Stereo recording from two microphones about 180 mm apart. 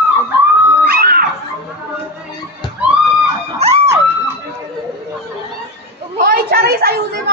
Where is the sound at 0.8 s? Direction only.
55° right (ahead or behind).